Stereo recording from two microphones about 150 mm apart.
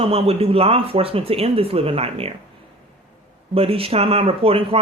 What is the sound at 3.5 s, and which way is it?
Speech, 40° right (ahead or behind).